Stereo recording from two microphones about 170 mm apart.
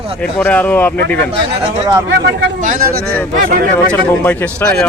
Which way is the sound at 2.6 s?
55° right (ahead or behind).